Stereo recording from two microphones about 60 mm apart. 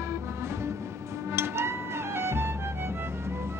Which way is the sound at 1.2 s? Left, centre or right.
Right.